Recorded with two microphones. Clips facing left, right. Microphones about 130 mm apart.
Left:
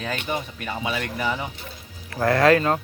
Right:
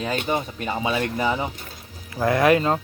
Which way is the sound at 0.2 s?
30° right (ahead or behind).